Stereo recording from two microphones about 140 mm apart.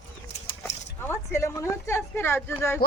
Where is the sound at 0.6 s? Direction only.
15° left (ahead or behind).